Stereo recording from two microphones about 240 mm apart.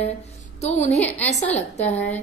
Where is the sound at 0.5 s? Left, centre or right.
Left.